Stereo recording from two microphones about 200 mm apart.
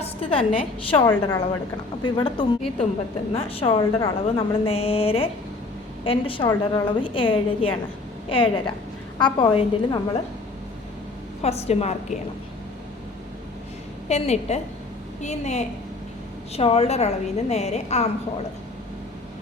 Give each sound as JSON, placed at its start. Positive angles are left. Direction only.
{"t": 0.0, "sound": "a woman's voice", "side_deg": 30}
{"t": 1.0, "sound": "a woman's voice", "side_deg": 15}
{"t": 11.4, "sound": "a woman's voice", "side_deg": 30}
{"t": 14.1, "sound": "a woman's voice", "side_deg": 35}